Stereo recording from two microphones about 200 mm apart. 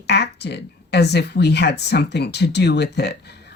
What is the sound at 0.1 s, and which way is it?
Speech, 55° left (ahead or behind).